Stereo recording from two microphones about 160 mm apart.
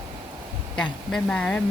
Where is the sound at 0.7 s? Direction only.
5° left (ahead or behind).